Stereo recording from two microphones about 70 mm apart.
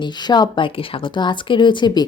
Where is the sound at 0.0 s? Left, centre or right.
Left.